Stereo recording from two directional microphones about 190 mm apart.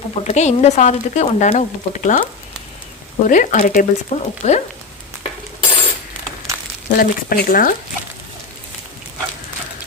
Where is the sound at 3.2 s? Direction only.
45° left (ahead or behind).